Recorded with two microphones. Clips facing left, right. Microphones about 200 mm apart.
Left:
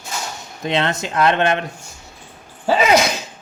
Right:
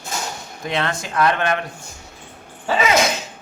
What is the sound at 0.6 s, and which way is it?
A man's voice, 25° left (ahead or behind).